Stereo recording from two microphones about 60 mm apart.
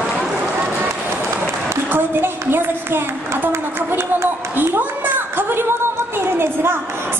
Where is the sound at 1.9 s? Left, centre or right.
Right.